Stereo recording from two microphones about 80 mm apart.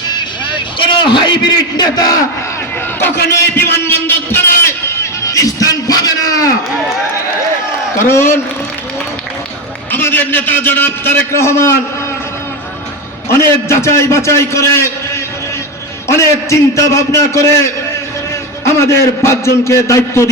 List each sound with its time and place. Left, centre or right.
0.8 s a man's voice: left
3.7 s music: left
7.9 s a man's voice: left
9.9 s a man's voice: left
13.2 s a man's voice: left
18.6 s a man's voice: left